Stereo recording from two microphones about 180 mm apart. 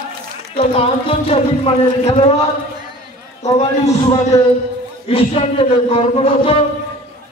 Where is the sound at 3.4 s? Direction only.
40° left (ahead or behind).